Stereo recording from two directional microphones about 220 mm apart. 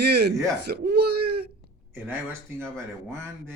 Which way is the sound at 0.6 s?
45° right (ahead or behind).